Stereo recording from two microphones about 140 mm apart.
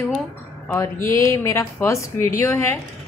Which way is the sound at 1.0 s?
20° left (ahead or behind).